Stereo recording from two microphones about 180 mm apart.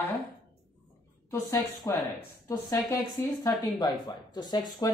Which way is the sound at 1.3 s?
15° left (ahead or behind).